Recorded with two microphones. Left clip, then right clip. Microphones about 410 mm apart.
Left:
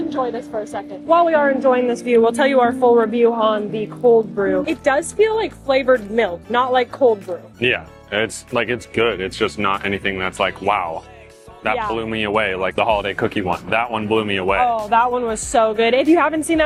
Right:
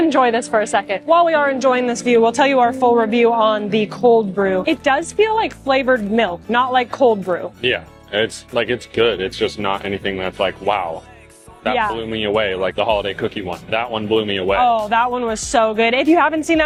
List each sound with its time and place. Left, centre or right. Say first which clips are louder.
0.1 s a woman's voice: right 8 dB; right
1.1 s speech: even; right
4.4 s speech: right 2 dB; centre
7.6 s speech: even; centre
11.9 s speech: right 1 dB; centre
14.7 s speech: even; right